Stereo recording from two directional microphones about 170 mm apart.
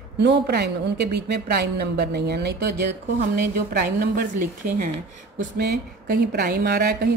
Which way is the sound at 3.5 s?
55° right (ahead or behind).